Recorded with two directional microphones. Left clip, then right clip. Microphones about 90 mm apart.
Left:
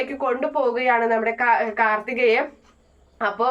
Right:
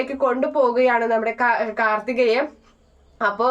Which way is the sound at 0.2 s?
30° right (ahead or behind).